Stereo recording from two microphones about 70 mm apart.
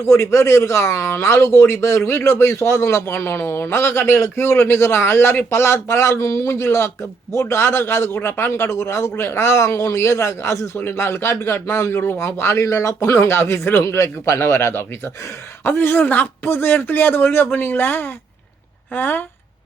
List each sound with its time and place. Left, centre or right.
0.1 s a man's voice: left